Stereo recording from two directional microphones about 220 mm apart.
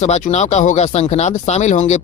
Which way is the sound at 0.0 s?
30° left (ahead or behind).